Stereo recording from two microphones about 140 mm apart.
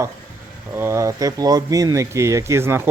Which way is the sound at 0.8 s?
20° right (ahead or behind).